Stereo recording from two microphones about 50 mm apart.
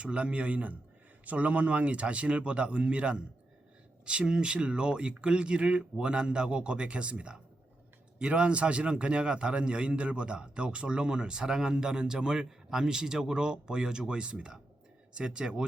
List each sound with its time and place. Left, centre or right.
0.0 s a man's voice: right